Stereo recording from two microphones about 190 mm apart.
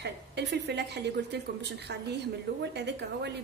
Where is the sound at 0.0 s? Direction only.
65° right (ahead or behind).